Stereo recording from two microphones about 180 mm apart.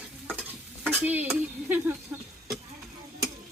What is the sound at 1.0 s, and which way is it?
Speech, 10° right (ahead or behind).